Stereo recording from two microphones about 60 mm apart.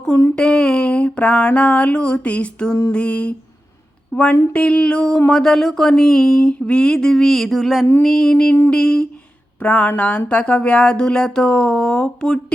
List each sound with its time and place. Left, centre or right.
0.3 s speech: centre
5.3 s a sound: centre
9.6 s speech: left